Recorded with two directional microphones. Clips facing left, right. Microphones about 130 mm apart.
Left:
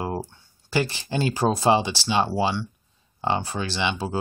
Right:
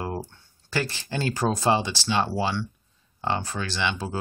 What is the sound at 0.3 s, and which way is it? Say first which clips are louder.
Speech: left 4 dB; 15° left (ahead or behind).